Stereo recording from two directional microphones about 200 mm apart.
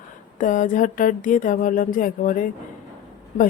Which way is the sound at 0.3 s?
40° left (ahead or behind).